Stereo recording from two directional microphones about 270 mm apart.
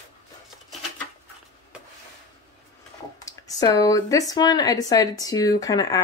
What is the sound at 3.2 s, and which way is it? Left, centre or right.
Speech, centre.